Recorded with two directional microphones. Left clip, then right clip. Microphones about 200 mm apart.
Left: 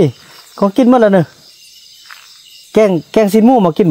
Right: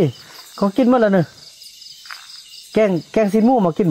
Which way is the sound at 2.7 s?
40° left (ahead or behind).